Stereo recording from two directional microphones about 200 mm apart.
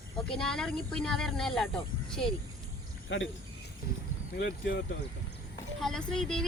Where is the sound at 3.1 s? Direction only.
65° left (ahead or behind).